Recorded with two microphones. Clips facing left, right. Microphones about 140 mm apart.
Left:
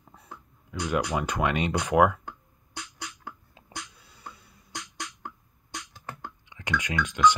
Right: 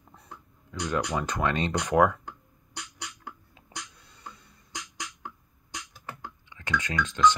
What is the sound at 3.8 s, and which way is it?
Beatboxing, 5° left (ahead or behind).